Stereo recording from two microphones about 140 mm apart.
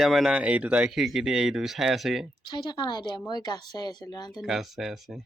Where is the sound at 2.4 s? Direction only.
30° left (ahead or behind).